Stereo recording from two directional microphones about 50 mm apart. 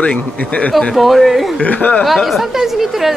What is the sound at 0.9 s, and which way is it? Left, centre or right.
Speech, centre.